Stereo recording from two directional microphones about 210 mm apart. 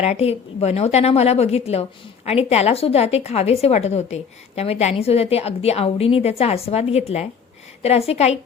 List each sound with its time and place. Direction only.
0.0 s a woman's voice: 30° left (ahead or behind)